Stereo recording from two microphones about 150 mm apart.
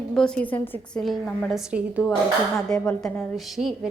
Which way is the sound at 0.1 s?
5° left (ahead or behind).